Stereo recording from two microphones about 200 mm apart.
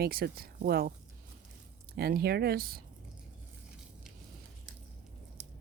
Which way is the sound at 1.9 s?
50° right (ahead or behind).